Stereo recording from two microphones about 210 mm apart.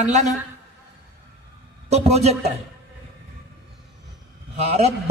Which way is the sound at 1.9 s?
30° right (ahead or behind).